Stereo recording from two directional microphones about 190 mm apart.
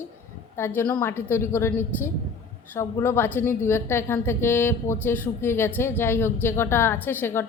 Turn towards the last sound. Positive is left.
turn(degrees=10)  # may be behind; listen again after turning